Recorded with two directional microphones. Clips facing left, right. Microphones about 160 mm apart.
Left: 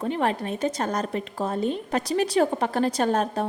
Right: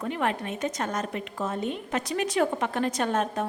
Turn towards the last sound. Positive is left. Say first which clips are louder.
# left 3 dB
turn(degrees=35)  # may be behind; listen again after turning